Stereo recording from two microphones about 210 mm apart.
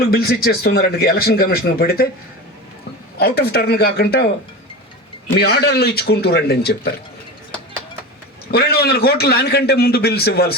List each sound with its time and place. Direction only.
0.0 s speech: 45° left (ahead or behind)
3.2 s speech: 50° left (ahead or behind)
5.4 s speech: 50° left (ahead or behind)
8.4 s speech: 45° left (ahead or behind)